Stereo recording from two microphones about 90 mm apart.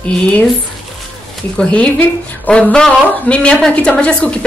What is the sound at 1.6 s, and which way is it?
A woman's voice, 15° left (ahead or behind).